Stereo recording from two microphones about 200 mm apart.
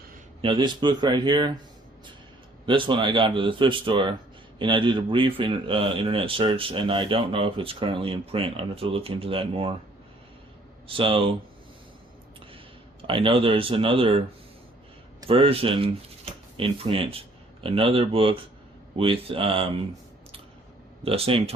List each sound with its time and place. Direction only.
0.4 s a man's voice: 25° right (ahead or behind)
2.6 s a man's voice: 25° right (ahead or behind)
10.8 s a man's voice: 25° right (ahead or behind)
13.0 s a man's voice: 25° right (ahead or behind)
21.0 s a man's voice: 30° right (ahead or behind)